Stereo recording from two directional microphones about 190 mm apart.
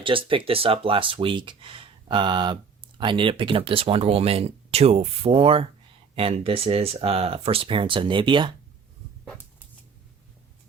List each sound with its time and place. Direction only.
0.0 s speech: 25° right (ahead or behind)